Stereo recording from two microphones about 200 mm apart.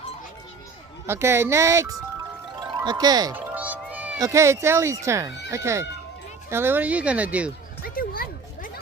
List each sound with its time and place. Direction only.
1.0 s speech: 10° right (ahead or behind)
7.9 s music: 45° left (ahead or behind)